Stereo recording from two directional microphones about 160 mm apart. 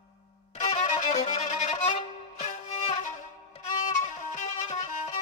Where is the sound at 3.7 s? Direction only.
45° left (ahead or behind).